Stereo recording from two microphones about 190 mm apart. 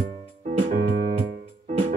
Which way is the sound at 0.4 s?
40° right (ahead or behind).